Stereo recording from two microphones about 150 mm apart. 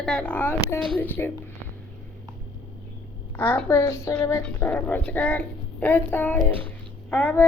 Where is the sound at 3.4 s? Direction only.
10° left (ahead or behind).